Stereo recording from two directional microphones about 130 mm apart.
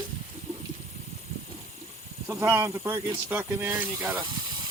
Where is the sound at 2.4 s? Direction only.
25° right (ahead or behind).